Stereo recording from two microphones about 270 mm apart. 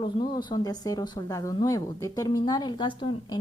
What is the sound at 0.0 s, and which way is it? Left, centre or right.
A woman's voice, centre.